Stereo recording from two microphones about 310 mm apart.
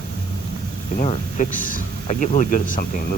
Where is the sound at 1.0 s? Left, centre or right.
Left.